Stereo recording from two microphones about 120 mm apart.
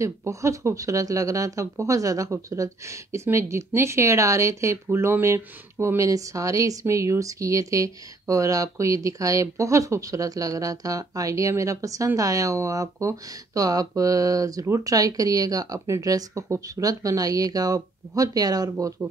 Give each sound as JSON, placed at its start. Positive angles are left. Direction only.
{"t": 0.0, "sound": "speech", "side_deg": -25}